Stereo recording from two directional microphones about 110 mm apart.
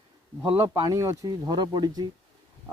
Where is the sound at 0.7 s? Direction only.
30° right (ahead or behind).